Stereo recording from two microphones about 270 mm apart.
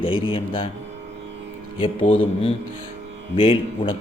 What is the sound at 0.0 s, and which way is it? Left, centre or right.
Speech, centre.